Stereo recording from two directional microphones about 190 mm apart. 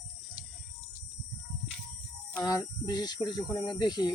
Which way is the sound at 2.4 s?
20° left (ahead or behind).